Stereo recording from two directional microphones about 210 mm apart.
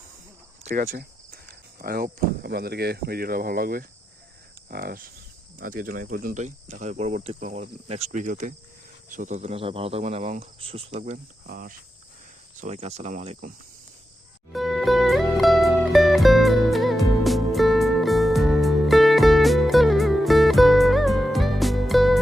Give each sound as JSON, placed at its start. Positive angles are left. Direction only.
{"t": 0.6, "sound": "cricket", "side_deg": -40}
{"t": 2.4, "sound": "speech", "side_deg": -50}
{"t": 11.4, "sound": "speech", "side_deg": -40}
{"t": 12.5, "sound": "speech", "side_deg": -30}
{"t": 14.5, "sound": "music", "side_deg": 0}